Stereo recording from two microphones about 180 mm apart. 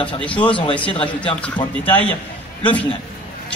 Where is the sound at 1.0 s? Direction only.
25° left (ahead or behind).